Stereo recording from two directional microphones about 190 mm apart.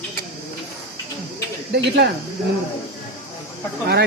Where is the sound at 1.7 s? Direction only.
60° right (ahead or behind).